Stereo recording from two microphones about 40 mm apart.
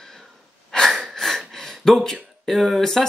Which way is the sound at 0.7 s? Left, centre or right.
Centre.